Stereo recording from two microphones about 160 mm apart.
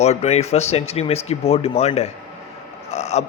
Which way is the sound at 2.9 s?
45° left (ahead or behind).